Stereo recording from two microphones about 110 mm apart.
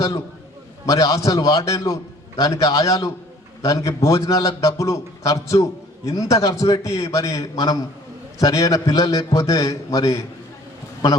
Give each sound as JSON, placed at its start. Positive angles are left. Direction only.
{"t": 0.9, "sound": "a man's voice", "side_deg": 35}